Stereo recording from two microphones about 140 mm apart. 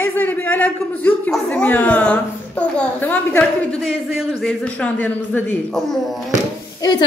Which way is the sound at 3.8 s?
Centre (ahead or behind).